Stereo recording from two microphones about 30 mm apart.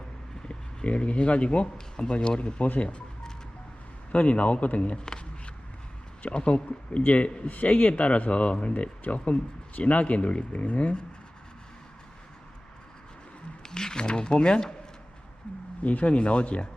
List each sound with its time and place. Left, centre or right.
0.9 s speech: left
2.6 s speech: left
4.1 s speech: left
4.9 s speech: left
6.3 s speech: left
7.4 s speech: left
13.6 s speech: left
15.5 s speech: left
16.1 s speech: left